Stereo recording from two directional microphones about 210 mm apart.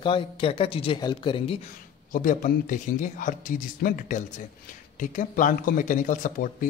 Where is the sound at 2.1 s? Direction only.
40° left (ahead or behind).